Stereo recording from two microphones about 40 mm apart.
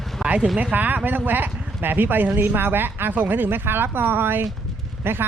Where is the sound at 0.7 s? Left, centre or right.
Right.